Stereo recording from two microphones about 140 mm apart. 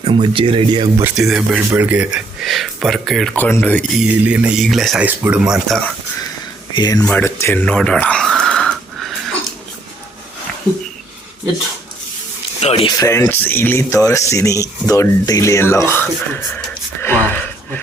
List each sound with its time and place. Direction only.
0.1 s speech: 35° right (ahead or behind)
1.1 s speech: 5° right (ahead or behind)
3.3 s speech: 15° left (ahead or behind)
4.1 s speech: 10° right (ahead or behind)
5.0 s speech: 10° right (ahead or behind)
6.7 s speech: 30° left (ahead or behind)
7.0 s speech: 10° left (ahead or behind)
7.7 s a sound: 5° left (ahead or behind)
12.5 s speech: 45° left (ahead or behind)
12.9 s speech: 20° left (ahead or behind)
17.0 s a sound: 15° left (ahead or behind)